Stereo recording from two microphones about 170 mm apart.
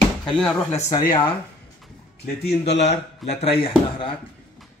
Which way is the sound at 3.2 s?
Centre (ahead or behind).